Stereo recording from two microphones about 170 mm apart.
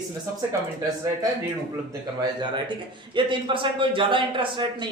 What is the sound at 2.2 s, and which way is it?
A man's voice, 25° right (ahead or behind).